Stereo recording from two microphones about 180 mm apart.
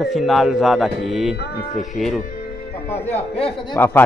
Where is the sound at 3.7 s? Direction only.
10° left (ahead or behind).